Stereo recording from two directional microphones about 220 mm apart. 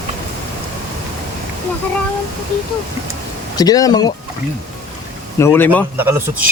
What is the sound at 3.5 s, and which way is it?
Speech, 15° left (ahead or behind).